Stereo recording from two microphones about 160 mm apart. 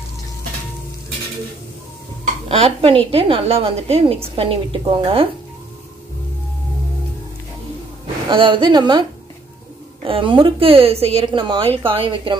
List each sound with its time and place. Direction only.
2.4 s a woman's voice: 35° right (ahead or behind)
8.3 s a woman's voice: 30° right (ahead or behind)
10.0 s a woman's voice: 30° right (ahead or behind)